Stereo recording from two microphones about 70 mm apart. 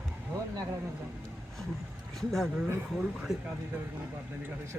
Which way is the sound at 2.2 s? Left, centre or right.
Centre.